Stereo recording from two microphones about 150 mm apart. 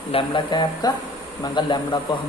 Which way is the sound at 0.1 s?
35° left (ahead or behind).